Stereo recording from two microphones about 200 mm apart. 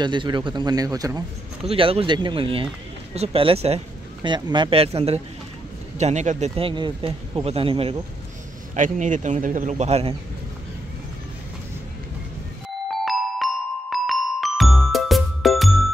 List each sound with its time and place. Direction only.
0.0 s speech: 25° right (ahead or behind)
1.6 s speech: 30° right (ahead or behind)
8.7 s speech: 40° right (ahead or behind)
13.0 s music: centre (ahead or behind)